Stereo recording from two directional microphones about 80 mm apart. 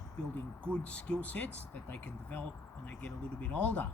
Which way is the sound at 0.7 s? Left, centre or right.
Centre.